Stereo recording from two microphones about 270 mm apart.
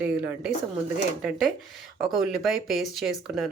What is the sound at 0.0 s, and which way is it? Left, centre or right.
Speech, centre.